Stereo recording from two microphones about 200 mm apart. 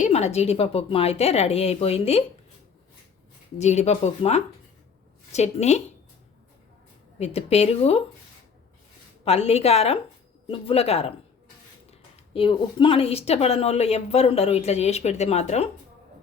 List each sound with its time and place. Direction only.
0.0 s speech: 35° left (ahead or behind)
3.6 s speech: 35° left (ahead or behind)
7.2 s speech: 30° left (ahead or behind)
9.2 s speech: 30° left (ahead or behind)